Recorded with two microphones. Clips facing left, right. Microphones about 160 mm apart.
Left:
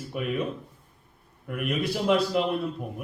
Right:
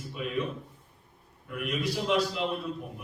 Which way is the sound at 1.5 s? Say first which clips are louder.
Left 4 dB; 55° left (ahead or behind).